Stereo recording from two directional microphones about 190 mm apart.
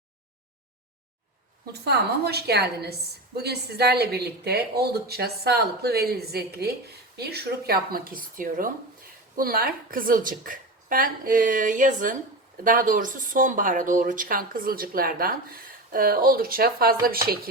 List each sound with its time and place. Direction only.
1.8 s speech: 60° right (ahead or behind)